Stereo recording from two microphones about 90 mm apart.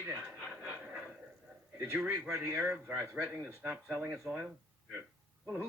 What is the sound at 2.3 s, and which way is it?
Speech, 25° right (ahead or behind).